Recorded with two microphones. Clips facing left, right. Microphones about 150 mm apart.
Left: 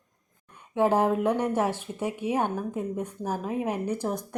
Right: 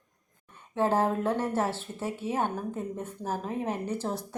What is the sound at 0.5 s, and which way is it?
Speech, 15° left (ahead or behind).